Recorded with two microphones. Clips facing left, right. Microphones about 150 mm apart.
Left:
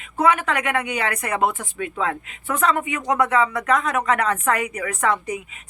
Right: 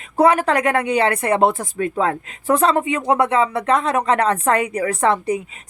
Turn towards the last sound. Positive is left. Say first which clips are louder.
# right 5 dB
turn(degrees=-30)  # may be behind; listen again after turning